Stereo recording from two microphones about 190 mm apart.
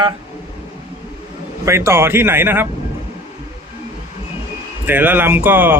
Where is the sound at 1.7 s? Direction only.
15° right (ahead or behind).